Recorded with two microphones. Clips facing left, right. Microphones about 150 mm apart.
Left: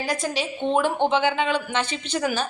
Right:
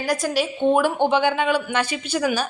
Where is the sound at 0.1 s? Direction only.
20° left (ahead or behind).